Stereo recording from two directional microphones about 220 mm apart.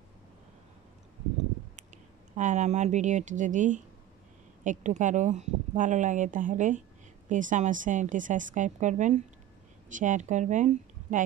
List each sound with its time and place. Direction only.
2.3 s speech: 35° right (ahead or behind)